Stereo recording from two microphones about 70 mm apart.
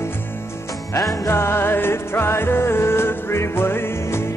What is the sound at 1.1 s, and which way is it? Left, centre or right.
Music, left.